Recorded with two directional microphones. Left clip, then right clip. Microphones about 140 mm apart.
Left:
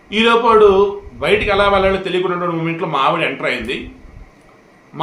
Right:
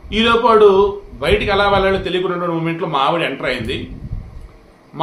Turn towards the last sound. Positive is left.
turn(degrees=5)  # may be behind; listen again after turning